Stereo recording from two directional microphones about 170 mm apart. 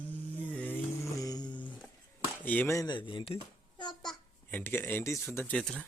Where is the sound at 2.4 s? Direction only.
10° left (ahead or behind); by 3.4 s 30° left (ahead or behind).